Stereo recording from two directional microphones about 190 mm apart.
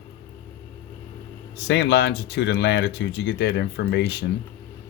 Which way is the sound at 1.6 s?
65° left (ahead or behind).